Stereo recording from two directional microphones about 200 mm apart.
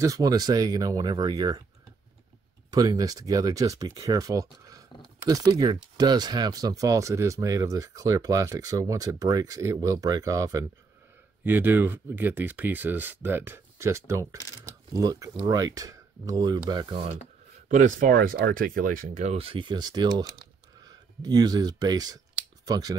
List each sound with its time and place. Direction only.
0.0 s speech: 15° right (ahead or behind)
2.7 s speech: 20° right (ahead or behind)
17.6 s speech: 40° right (ahead or behind)
18.1 s speech: 50° right (ahead or behind); by 22.9 s 20° right (ahead or behind)